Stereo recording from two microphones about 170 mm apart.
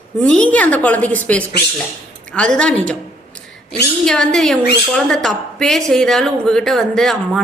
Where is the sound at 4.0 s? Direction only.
5° left (ahead or behind).